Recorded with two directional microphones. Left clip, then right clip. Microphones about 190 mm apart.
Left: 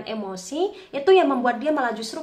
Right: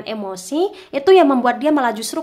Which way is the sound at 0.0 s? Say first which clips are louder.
Right 5 dB; 35° right (ahead or behind).